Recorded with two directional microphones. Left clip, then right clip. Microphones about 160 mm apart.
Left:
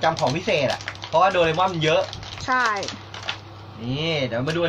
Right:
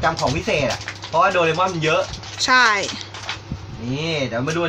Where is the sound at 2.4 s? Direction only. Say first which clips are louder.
Right 7 dB; 25° right (ahead or behind).